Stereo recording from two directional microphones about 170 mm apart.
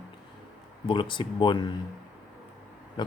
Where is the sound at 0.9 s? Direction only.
30° left (ahead or behind).